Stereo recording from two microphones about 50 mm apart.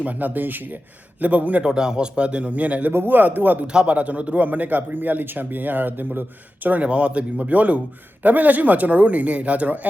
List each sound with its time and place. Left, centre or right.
0.0 s speech: right
1.6 s speech: centre
2.9 s speech: right
3.7 s speech: right
6.8 s speech: right